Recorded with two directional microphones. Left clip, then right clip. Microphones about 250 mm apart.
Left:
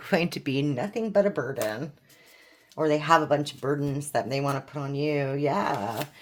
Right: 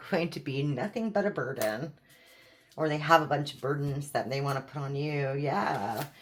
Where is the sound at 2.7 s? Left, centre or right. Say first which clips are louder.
Left 3 dB; left.